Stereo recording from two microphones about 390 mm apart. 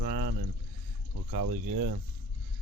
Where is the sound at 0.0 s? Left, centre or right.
Right.